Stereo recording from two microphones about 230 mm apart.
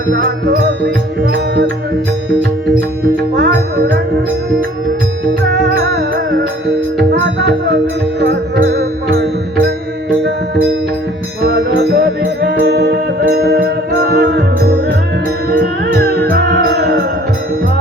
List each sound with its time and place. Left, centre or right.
0.1 s music: right
2.7 s music: centre
3.3 s music: right
6.7 s music: right